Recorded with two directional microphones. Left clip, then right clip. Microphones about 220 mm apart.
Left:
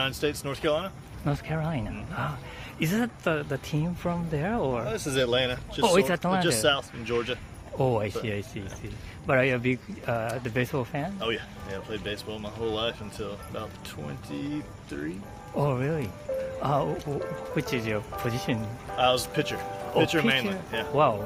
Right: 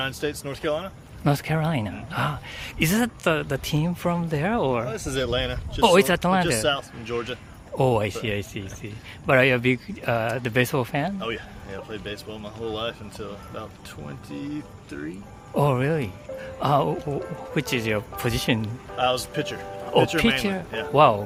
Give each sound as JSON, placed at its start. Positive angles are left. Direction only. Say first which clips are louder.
{"t": 0.0, "sound": "speech", "louder": "even", "side_deg": -5}
{"t": 1.2, "sound": "speech", "louder": "right 7 dB", "side_deg": -50}
{"t": 4.9, "sound": "speech", "louder": "even", "side_deg": -5}
{"t": 5.8, "sound": "speech", "louder": "right 5 dB", "side_deg": -40}
{"t": 6.4, "sound": "speech", "louder": "right 1 dB", "side_deg": -5}
{"t": 7.8, "sound": "speech", "louder": "right 4 dB", "side_deg": -35}
{"t": 11.2, "sound": "speech", "louder": "even", "side_deg": 0}
{"t": 15.5, "sound": "speech", "louder": "right 5 dB", "side_deg": -45}
{"t": 18.9, "sound": "speech", "louder": "even", "side_deg": -5}
{"t": 20.9, "sound": "speech", "louder": "right 7 dB", "side_deg": -45}